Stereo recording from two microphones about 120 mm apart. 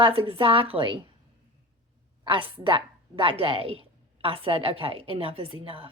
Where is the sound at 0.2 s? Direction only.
45° right (ahead or behind).